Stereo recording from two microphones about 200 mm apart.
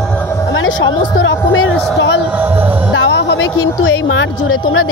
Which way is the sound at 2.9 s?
60° left (ahead or behind).